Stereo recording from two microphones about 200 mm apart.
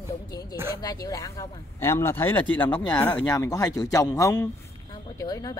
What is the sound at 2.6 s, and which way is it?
Speech, 20° left (ahead or behind).